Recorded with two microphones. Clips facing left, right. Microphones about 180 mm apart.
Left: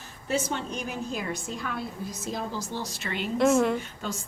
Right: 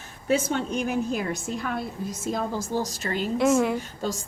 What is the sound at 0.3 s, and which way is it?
Speech, 55° right (ahead or behind).